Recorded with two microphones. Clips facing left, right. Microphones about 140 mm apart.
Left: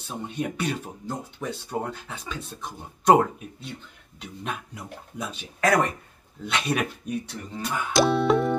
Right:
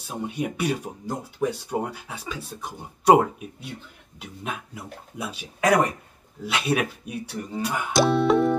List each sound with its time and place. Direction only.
0.0 s speech: 10° right (ahead or behind)